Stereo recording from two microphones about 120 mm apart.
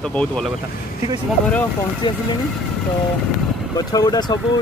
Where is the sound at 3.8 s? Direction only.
35° left (ahead or behind).